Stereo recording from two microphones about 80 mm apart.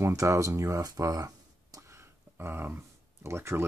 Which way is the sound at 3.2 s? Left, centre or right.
Right.